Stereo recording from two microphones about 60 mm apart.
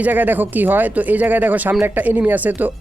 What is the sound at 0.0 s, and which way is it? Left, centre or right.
Speech, right.